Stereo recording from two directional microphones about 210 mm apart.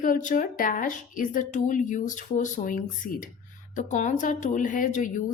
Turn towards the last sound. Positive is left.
turn(degrees=35)  # may be behind; listen again after turning